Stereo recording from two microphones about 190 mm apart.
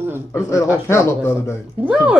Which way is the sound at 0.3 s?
15° left (ahead or behind).